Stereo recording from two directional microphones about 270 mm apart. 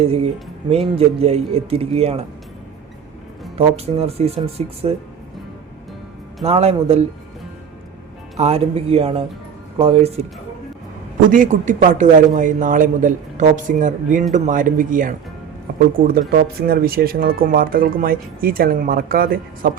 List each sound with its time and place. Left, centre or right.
0.0 s speech: right
3.8 s speech: right
6.4 s speech: right
8.4 s speech: right
11.3 s speech: right
16.3 s speech: right